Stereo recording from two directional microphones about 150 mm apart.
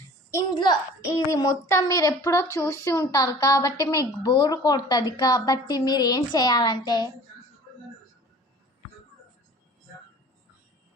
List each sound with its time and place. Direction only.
0.3 s a child's voice: 20° left (ahead or behind)